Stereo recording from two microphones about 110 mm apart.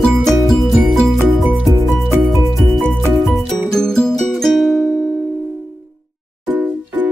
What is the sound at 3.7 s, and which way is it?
Music, 5° left (ahead or behind).